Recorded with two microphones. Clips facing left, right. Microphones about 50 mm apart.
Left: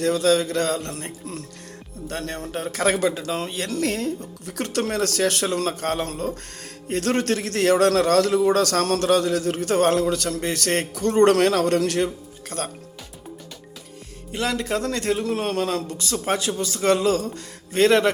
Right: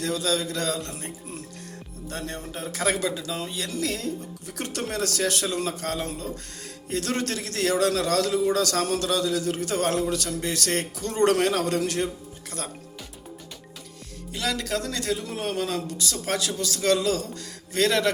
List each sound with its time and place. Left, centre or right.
0.0 s speech: left
2.0 s music: left
2.7 s speech: left
14.3 s a man's voice: left
15.2 s a man's voice: left